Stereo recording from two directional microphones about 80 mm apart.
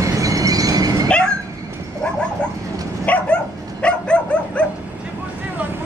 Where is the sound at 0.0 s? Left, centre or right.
Right.